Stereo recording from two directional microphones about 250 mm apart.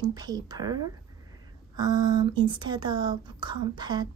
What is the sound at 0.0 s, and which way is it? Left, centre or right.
A woman's voice, centre.